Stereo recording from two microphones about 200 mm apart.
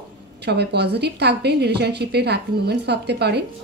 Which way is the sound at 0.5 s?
55° right (ahead or behind).